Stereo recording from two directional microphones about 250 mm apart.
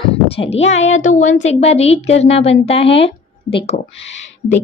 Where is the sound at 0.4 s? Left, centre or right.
Left.